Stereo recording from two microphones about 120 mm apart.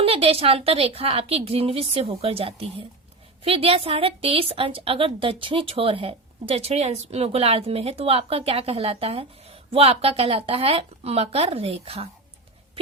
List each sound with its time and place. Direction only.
0.0 s a woman's voice: 55° right (ahead or behind)